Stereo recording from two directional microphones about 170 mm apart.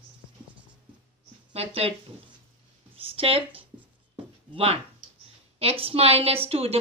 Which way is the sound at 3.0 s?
35° right (ahead or behind).